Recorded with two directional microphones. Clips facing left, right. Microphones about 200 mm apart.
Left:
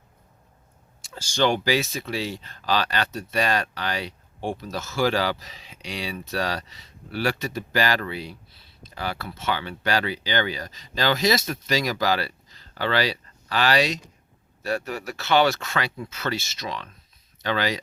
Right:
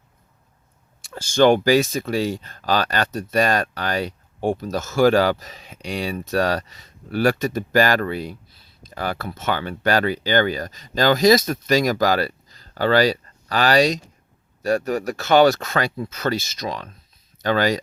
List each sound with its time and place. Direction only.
1.0 s speech: 55° right (ahead or behind)